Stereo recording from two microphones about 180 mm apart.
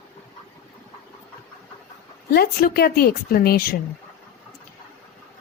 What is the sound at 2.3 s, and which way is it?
A woman's voice, 60° left (ahead or behind).